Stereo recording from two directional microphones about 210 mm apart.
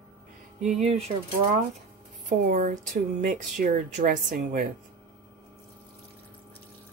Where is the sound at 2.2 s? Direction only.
35° right (ahead or behind).